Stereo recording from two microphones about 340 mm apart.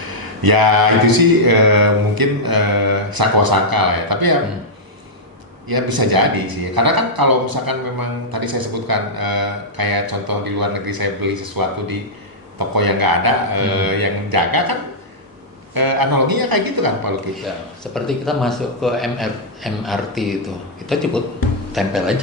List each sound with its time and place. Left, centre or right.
0.1 s a man's voice: right
5.6 s a man's voice: right
17.9 s a man's voice: centre